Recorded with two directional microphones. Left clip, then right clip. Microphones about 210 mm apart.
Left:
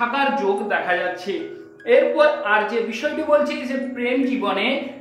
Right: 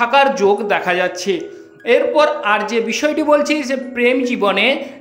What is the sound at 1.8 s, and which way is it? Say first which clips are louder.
Speech: right 2 dB; 50° right (ahead or behind).